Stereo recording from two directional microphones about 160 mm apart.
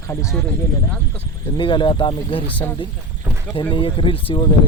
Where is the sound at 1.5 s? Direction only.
30° left (ahead or behind).